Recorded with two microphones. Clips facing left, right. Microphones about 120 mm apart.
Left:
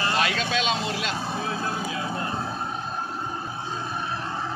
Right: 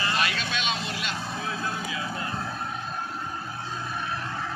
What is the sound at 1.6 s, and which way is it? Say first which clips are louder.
Music: left 3 dB; 35° left (ahead or behind).